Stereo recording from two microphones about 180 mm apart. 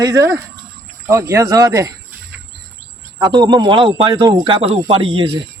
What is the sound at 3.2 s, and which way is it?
A man's voice, 25° right (ahead or behind).